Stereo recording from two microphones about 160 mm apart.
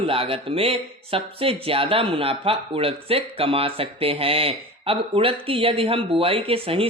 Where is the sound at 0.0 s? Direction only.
35° right (ahead or behind).